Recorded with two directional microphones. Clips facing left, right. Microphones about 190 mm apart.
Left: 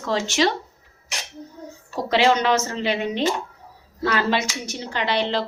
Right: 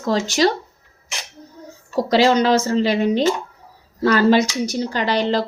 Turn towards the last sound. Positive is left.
turn(degrees=-40)  # may be behind; listen again after turning